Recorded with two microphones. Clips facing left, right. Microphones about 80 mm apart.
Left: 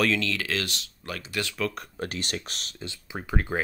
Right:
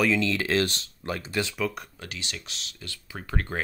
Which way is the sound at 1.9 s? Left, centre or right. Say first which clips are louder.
Left 7 dB; left.